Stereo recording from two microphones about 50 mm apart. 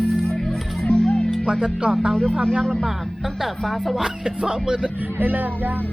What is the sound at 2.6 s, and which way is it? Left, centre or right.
Speech, centre.